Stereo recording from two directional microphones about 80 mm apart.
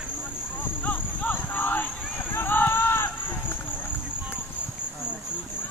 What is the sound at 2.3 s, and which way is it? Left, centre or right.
Run, left.